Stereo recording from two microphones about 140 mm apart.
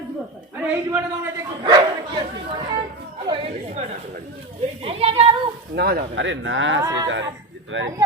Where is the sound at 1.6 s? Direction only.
30° right (ahead or behind).